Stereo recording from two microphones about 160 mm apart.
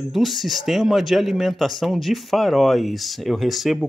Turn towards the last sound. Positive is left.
turn(degrees=0)  # may be behind; listen again after turning